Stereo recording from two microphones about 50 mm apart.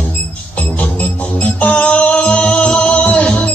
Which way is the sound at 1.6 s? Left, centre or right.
Left.